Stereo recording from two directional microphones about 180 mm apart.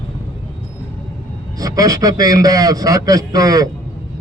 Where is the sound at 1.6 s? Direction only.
20° right (ahead or behind).